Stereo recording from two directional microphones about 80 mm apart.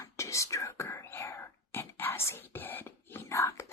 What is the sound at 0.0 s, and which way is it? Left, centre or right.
Whispering, left.